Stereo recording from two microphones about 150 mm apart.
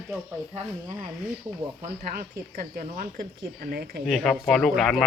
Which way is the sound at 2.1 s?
70° right (ahead or behind).